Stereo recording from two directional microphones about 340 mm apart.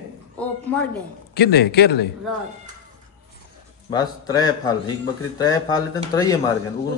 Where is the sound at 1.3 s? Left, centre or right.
Left.